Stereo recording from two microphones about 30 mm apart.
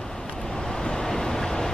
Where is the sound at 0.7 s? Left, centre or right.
Left.